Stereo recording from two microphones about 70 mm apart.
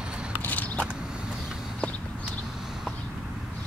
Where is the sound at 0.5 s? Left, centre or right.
Left.